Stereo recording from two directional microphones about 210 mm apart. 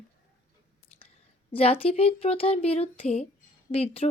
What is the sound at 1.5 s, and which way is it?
Speech, 30° left (ahead or behind).